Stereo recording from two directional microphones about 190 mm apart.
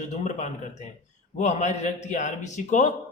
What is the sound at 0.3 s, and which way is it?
Speech, 40° left (ahead or behind).